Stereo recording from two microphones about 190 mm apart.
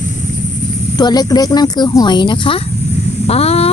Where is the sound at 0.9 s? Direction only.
20° left (ahead or behind).